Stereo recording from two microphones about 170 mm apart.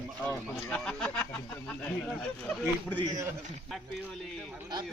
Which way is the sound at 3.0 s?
20° right (ahead or behind).